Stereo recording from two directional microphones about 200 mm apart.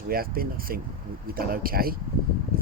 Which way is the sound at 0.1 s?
45° right (ahead or behind).